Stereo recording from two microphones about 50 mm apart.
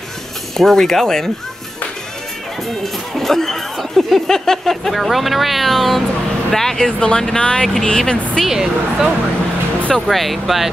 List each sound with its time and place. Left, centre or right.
0.6 s speech: centre
2.8 s speech: centre
7.6 s speech: centre
8.5 s speech: centre
9.9 s speech: centre